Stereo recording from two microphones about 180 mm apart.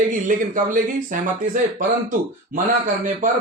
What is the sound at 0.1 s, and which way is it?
Speech, 45° right (ahead or behind).